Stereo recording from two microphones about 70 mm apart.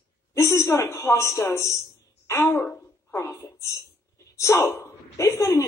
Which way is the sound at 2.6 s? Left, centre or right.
Left.